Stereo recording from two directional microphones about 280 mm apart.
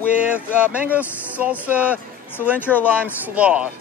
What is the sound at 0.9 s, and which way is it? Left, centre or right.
Speech, centre.